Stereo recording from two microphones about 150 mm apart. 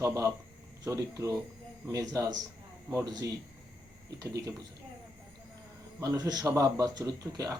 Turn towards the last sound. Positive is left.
turn(degrees=-25)  # may be behind; listen again after turning